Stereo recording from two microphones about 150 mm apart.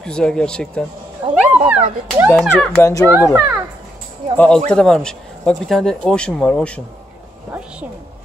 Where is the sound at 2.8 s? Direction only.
20° left (ahead or behind).